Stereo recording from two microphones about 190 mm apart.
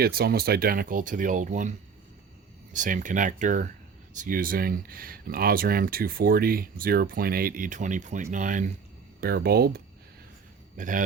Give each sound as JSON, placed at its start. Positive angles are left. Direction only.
{"t": 0.0, "sound": "speech", "side_deg": -55}
{"t": 2.7, "sound": "speech", "side_deg": -40}
{"t": 9.2, "sound": "speech", "side_deg": -55}
{"t": 10.8, "sound": "a man's voice", "side_deg": -45}